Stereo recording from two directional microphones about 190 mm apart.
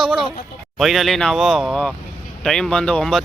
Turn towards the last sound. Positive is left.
turn(degrees=5)  # may be behind; listen again after turning